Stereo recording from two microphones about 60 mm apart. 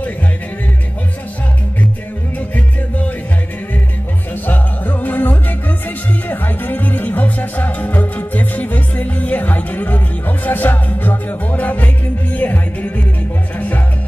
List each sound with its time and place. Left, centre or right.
2.3 s music: left
4.5 s music: left